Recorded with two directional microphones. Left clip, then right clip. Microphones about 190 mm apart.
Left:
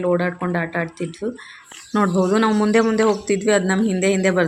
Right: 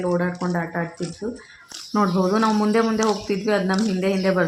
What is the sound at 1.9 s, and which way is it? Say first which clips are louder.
Speech: left 2 dB; 15° left (ahead or behind).